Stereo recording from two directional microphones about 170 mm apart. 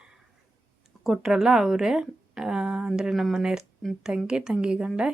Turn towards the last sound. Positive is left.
turn(degrees=-5)  # may be behind; listen again after turning